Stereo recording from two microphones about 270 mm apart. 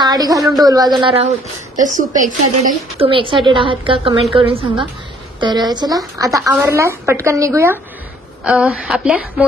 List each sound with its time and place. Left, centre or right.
0.0 s a woman's voice: centre
1.9 s a woman's voice: right; by 9.5 s centre